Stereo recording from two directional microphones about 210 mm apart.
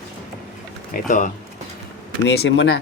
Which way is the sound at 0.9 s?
35° left (ahead or behind).